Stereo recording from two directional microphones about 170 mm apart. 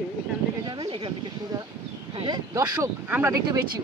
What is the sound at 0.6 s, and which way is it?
Speech, 25° right (ahead or behind).